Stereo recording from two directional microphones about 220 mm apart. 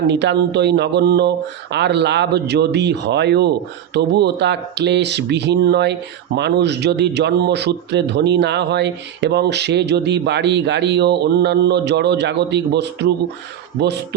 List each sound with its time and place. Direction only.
0.1 s speech: 50° right (ahead or behind)